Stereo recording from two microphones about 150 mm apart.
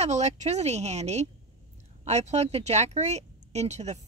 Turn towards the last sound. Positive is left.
turn(degrees=-50)  # may be behind; listen again after turning